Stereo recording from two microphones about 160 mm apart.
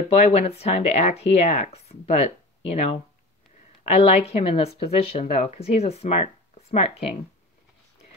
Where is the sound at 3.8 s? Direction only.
40° left (ahead or behind).